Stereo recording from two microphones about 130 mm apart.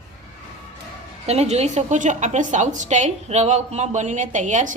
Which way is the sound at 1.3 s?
55° right (ahead or behind).